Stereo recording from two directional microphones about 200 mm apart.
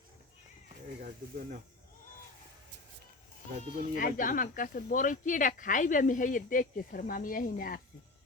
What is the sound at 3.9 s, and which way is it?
Speech, 45° left (ahead or behind).